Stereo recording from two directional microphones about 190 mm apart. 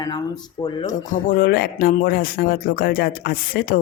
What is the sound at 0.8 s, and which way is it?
Speech, 40° left (ahead or behind).